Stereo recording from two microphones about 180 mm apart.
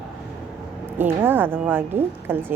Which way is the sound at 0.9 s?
10° right (ahead or behind).